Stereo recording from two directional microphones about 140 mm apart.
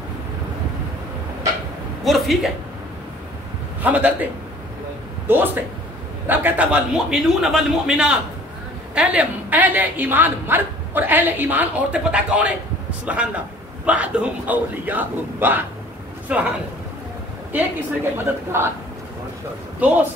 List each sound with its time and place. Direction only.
2.0 s speech: centre (ahead or behind)
3.8 s a woman's voice: 10° right (ahead or behind)
18.1 s a woman's voice: 15° right (ahead or behind)
19.8 s a woman's voice: 10° right (ahead or behind)